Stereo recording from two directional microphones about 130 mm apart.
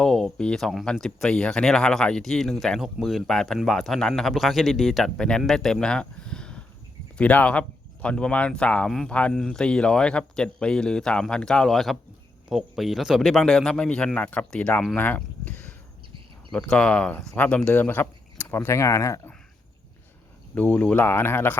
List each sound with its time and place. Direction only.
0.0 s speech: 5° left (ahead or behind); by 19.3 s 25° left (ahead or behind)
20.6 s speech: 10° left (ahead or behind)